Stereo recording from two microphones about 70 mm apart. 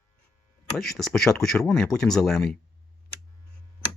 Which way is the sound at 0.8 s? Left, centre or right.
Centre.